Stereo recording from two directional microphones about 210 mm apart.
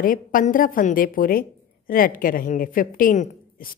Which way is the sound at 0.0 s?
40° left (ahead or behind).